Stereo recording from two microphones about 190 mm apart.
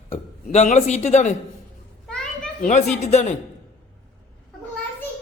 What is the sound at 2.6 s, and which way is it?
Speech, 35° left (ahead or behind).